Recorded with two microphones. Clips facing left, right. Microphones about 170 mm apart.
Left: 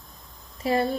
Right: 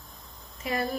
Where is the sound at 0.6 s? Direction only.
30° left (ahead or behind).